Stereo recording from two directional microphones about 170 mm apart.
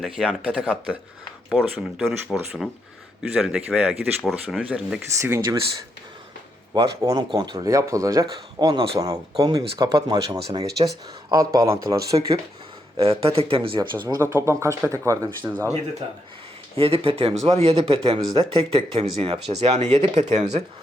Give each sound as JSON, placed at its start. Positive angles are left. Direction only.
{"t": 0.0, "sound": "speech", "side_deg": 0}
{"t": 6.7, "sound": "speech", "side_deg": -20}
{"t": 13.0, "sound": "speech", "side_deg": -35}
{"t": 13.7, "sound": "speech", "side_deg": -15}
{"t": 16.7, "sound": "speech", "side_deg": -35}